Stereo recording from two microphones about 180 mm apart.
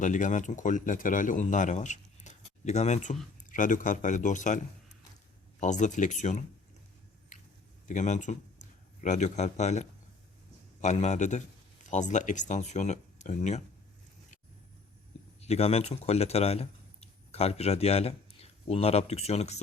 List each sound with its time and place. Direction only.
0.0 s a man's voice: 45° left (ahead or behind)
7.3 s squish: 45° left (ahead or behind)
7.9 s a man's voice: 40° left (ahead or behind)
15.4 s a man's voice: 35° left (ahead or behind)